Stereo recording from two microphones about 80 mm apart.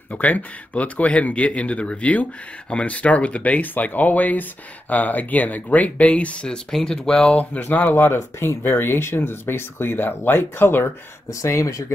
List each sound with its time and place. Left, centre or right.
0.1 s speech: centre
7.3 s speech: centre
7.9 s speech: left
11.2 s speech: left